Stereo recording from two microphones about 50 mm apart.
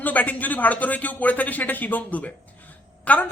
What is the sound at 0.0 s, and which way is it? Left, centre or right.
Speech, left.